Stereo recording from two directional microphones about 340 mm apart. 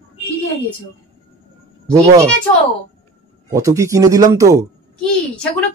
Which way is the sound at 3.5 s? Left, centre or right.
Centre.